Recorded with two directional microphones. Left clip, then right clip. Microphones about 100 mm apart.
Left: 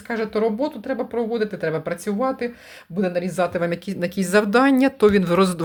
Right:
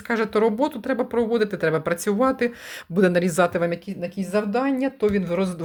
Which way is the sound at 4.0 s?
90° left.